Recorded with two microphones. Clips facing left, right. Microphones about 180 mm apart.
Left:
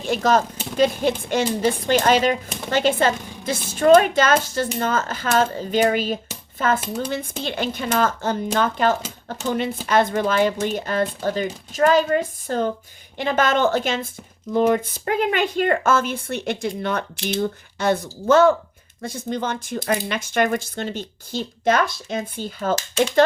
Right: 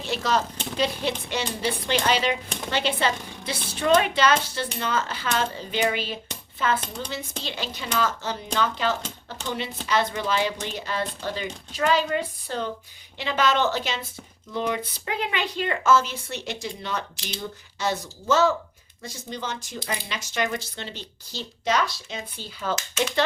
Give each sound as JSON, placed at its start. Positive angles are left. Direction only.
{"t": 0.0, "sound": "speech", "side_deg": 50}
{"t": 6.7, "sound": "speech", "side_deg": 5}
{"t": 7.1, "sound": "speech", "side_deg": 55}
{"t": 22.7, "sound": "speech", "side_deg": 30}